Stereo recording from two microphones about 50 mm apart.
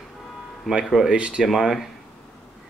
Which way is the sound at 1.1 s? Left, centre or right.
Right.